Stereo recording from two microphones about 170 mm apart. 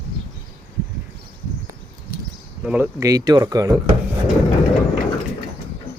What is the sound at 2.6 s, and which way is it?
Speech, 5° right (ahead or behind).